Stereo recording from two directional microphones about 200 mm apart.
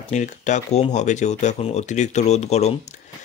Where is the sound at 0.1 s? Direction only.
35° left (ahead or behind).